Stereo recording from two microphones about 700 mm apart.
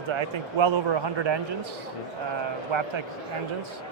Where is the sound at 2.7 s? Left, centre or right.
Right.